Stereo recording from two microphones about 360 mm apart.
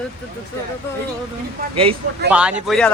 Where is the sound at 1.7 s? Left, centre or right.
Centre.